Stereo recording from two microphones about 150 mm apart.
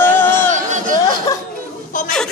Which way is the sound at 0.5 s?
55° right (ahead or behind).